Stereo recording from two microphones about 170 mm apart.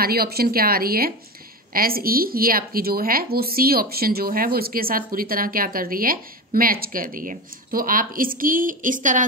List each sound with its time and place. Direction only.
0.0 s speech: 65° right (ahead or behind); by 9.2 s 50° right (ahead or behind)